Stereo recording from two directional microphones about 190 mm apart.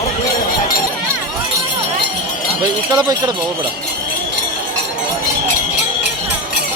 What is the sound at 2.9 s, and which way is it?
Speech, 20° right (ahead or behind).